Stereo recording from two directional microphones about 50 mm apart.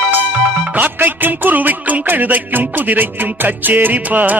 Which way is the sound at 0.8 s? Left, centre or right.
Right.